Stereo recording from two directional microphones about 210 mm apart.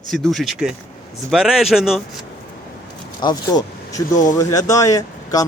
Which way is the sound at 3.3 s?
15° left (ahead or behind).